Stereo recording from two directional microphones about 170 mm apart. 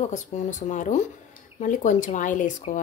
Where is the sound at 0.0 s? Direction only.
45° left (ahead or behind).